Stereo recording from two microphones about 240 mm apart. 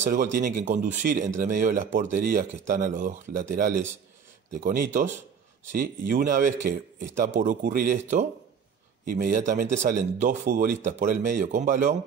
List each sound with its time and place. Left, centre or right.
0.0 s speech: right